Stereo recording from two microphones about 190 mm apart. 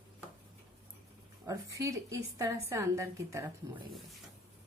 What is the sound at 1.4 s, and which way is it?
A woman's voice, 15° right (ahead or behind).